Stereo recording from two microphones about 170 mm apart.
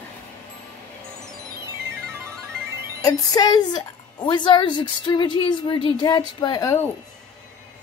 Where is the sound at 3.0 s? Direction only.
20° left (ahead or behind).